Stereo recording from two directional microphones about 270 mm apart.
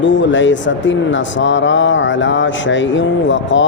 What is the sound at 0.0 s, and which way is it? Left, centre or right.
Speech, left.